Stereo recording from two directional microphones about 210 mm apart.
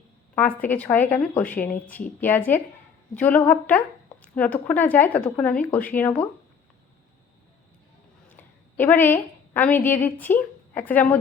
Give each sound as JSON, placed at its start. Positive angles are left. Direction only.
{"t": 0.3, "sound": "speech", "side_deg": 10}
{"t": 8.4, "sound": "a woman's voice", "side_deg": 10}